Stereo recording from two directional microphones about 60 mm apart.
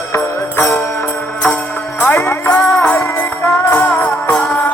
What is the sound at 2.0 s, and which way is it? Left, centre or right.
Music, left.